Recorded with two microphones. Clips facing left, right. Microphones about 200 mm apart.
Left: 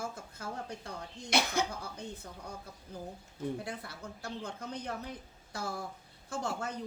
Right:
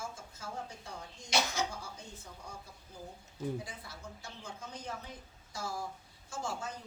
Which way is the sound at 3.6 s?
60° left (ahead or behind).